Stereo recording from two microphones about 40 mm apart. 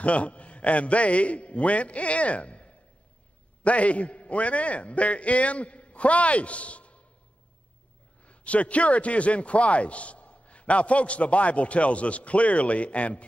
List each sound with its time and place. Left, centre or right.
0.0 s a man's voice: left
8.3 s a man's voice: left